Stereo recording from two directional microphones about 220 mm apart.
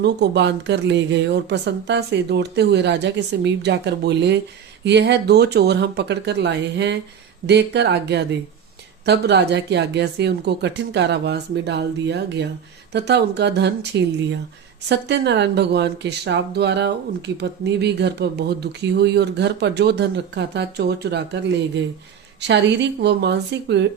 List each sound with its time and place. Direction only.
0.0 s speech: 50° right (ahead or behind)